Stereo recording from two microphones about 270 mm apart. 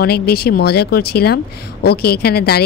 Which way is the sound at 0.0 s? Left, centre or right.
Left.